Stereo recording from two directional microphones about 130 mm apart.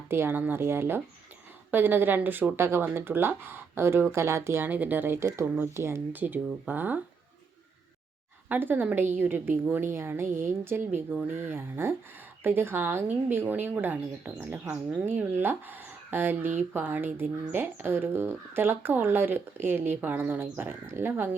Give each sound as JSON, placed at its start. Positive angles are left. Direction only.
{"t": 0.1, "sound": "speech", "side_deg": -15}
{"t": 8.4, "sound": "speech", "side_deg": -15}